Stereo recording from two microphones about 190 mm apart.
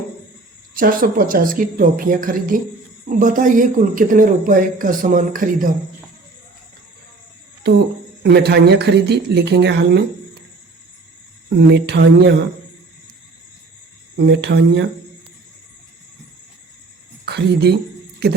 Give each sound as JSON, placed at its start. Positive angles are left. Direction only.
{"t": 0.7, "sound": "speech", "side_deg": -50}
{"t": 8.2, "sound": "speech", "side_deg": -60}
{"t": 11.7, "sound": "speech", "side_deg": -60}
{"t": 14.3, "sound": "speech", "side_deg": -65}
{"t": 17.2, "sound": "speech", "side_deg": -60}